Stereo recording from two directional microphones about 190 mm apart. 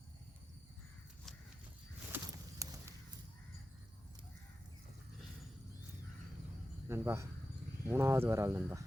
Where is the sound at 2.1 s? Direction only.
10° right (ahead or behind).